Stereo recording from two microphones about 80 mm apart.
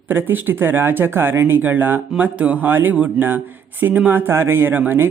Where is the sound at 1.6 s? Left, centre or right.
Right.